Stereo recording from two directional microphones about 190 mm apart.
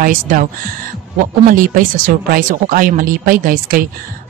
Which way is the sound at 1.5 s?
45° right (ahead or behind).